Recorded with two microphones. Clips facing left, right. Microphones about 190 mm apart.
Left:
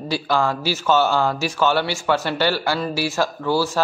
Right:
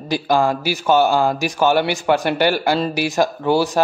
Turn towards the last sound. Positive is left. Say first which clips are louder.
# right 4 dB
turn(degrees=-20)  # may be behind; listen again after turning